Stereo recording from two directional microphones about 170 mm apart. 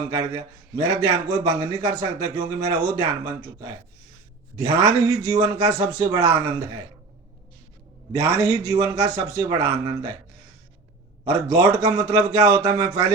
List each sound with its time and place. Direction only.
0.1 s a man's voice: 20° right (ahead or behind)
4.5 s a man's voice: 20° right (ahead or behind)
8.1 s a man's voice: 20° right (ahead or behind)
11.3 s a man's voice: 20° right (ahead or behind)